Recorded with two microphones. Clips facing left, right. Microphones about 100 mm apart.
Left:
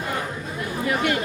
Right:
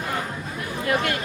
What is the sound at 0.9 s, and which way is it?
Speech, 5° left (ahead or behind).